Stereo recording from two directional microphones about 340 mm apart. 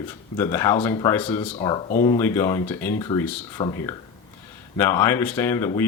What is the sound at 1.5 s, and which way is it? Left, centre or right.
Speech, centre.